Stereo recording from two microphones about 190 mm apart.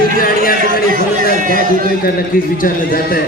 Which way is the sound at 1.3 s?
45° right (ahead or behind).